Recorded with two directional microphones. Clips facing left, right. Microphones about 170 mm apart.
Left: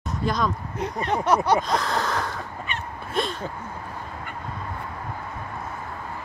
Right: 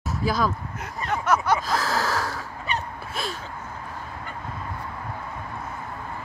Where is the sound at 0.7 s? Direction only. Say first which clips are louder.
Left 4 dB; 35° left (ahead or behind).